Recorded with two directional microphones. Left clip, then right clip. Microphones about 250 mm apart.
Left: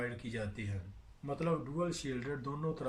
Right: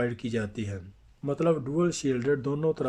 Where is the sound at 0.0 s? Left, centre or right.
Right.